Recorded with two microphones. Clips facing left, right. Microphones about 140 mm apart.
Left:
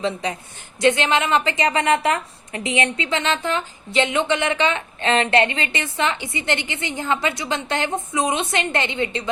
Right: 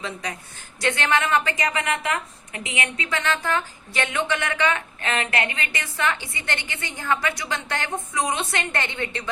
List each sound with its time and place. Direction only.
0.0 s a woman's voice: 25° left (ahead or behind)